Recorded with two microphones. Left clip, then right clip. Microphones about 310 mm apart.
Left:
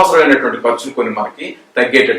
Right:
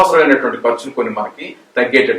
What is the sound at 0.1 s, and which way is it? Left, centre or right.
Speech, centre.